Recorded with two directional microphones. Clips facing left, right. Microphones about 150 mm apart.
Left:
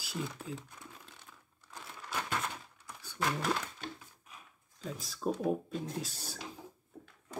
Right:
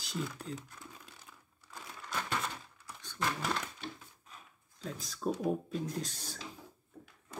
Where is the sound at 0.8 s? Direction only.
5° right (ahead or behind).